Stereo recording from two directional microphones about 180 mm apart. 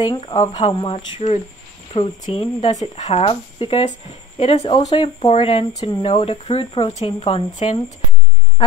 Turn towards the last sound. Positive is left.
turn(degrees=35)  # may be behind; listen again after turning